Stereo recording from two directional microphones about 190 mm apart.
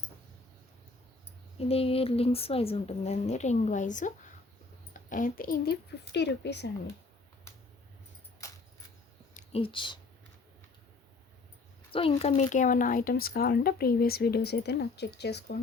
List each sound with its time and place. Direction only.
1.5 s a woman's voice: 30° left (ahead or behind); by 6.7 s 65° left (ahead or behind)
9.3 s speech: 30° left (ahead or behind)
11.9 s speech: 30° left (ahead or behind); by 15.5 s 60° left (ahead or behind)